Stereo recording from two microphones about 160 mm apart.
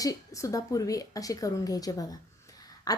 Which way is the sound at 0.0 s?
20° left (ahead or behind).